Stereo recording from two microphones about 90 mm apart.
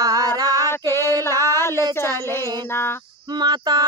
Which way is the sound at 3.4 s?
50° right (ahead or behind).